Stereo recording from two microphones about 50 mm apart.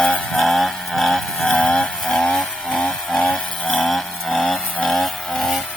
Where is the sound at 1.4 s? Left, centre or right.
Left.